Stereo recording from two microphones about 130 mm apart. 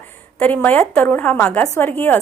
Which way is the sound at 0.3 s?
10° left (ahead or behind).